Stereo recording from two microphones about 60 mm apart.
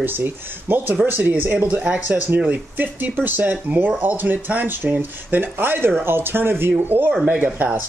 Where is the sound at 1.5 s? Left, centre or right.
Centre.